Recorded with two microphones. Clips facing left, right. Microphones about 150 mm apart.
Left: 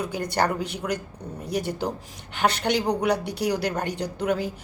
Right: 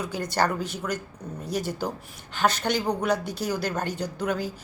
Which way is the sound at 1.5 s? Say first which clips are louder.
Left 2 dB; 60° left (ahead or behind).